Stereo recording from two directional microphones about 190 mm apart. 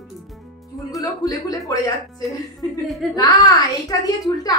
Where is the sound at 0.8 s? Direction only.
20° left (ahead or behind).